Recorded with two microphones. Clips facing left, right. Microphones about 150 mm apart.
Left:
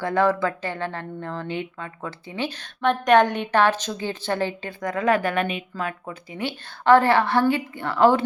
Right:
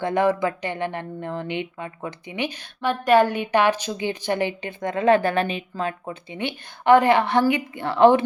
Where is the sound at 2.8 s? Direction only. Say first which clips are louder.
Even; 5° right (ahead or behind).